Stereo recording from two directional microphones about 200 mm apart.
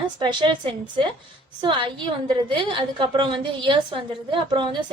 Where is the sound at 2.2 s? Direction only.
25° right (ahead or behind).